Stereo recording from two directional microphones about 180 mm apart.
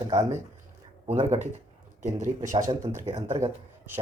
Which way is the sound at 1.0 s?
35° right (ahead or behind).